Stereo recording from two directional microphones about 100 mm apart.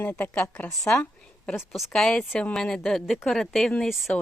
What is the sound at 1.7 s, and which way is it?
A woman's voice, centre (ahead or behind).